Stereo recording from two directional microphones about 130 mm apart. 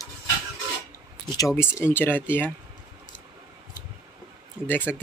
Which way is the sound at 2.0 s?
15° left (ahead or behind).